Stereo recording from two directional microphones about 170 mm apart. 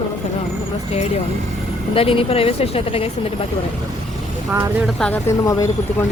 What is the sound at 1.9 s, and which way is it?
Speech, 35° left (ahead or behind).